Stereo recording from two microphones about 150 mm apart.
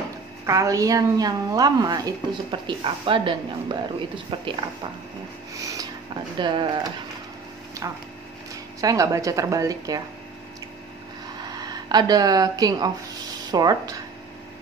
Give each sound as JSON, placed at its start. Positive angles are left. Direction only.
{"t": 0.5, "sound": "a woman's voice", "side_deg": -20}
{"t": 5.6, "sound": "a woman's voice", "side_deg": -20}
{"t": 8.8, "sound": "a woman's voice", "side_deg": -20}
{"t": 11.5, "sound": "a woman's voice", "side_deg": -25}